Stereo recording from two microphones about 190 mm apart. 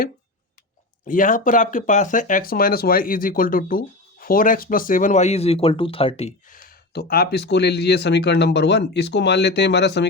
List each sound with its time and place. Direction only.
1.0 s speech: 45° left (ahead or behind)
6.5 s speech: 50° left (ahead or behind)